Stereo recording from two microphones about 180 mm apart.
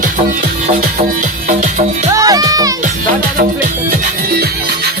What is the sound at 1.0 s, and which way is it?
Music, 45° right (ahead or behind).